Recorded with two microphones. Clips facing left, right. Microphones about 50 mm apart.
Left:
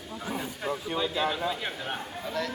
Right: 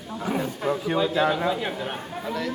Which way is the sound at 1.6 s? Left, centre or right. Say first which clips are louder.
Right 5 dB; centre.